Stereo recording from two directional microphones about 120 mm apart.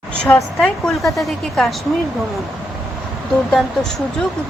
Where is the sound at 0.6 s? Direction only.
Centre (ahead or behind).